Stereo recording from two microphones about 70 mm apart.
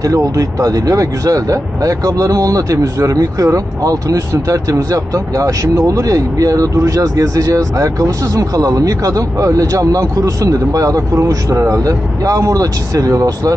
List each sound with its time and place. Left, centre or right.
0.0 s speech: right